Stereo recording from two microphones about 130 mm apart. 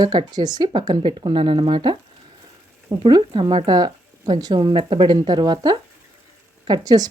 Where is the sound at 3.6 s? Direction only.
30° right (ahead or behind).